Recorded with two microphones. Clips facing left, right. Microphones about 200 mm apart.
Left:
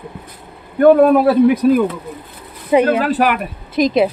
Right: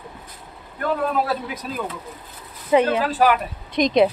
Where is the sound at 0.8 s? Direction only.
60° left (ahead or behind).